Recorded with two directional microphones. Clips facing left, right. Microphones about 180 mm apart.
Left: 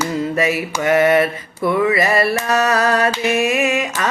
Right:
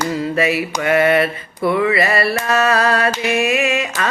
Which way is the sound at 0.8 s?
20° left (ahead or behind).